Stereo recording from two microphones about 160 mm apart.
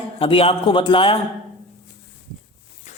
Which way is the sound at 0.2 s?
35° left (ahead or behind).